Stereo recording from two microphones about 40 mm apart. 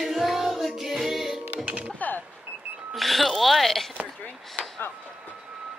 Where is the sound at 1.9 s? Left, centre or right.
Left.